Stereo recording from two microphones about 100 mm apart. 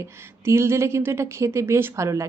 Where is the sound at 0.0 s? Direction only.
25° right (ahead or behind).